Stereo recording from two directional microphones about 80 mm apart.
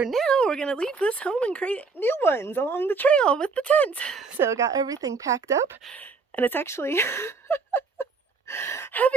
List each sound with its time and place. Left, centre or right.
0.1 s speech: centre
4.4 s a woman's voice: right
5.9 s speech: left
8.4 s gasp: left